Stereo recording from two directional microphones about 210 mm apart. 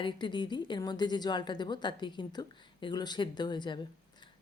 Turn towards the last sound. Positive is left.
turn(degrees=20)  # may be behind; listen again after turning